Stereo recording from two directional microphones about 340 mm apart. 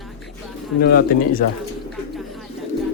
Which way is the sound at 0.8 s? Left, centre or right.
Left.